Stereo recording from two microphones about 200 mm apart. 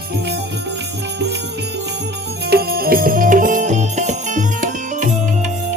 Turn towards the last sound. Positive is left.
turn(degrees=-40)  # may be behind; listen again after turning